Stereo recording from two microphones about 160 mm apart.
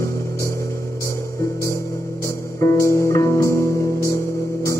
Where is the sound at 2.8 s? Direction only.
20° left (ahead or behind).